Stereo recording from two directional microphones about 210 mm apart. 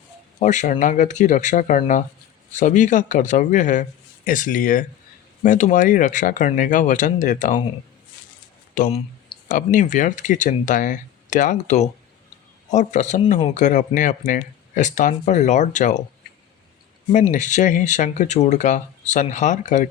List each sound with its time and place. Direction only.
0.3 s speech: 35° left (ahead or behind)
8.7 s speech: 40° left (ahead or behind)
17.1 s speech: 35° left (ahead or behind)